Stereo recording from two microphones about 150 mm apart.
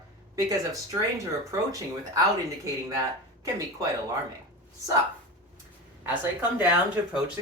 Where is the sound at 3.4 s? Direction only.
25° right (ahead or behind).